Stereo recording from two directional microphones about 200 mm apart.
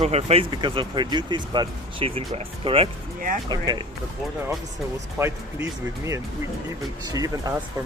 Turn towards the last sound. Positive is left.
turn(degrees=-15)  # may be behind; listen again after turning